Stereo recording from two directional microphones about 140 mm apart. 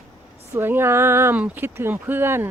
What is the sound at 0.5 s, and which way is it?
Speech, 15° right (ahead or behind).